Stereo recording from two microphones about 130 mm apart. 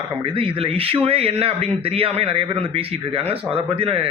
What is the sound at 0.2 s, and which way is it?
A man's voice, 45° right (ahead or behind).